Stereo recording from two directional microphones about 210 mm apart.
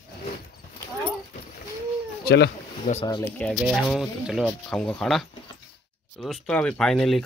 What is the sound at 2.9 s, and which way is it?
Speech, 30° left (ahead or behind).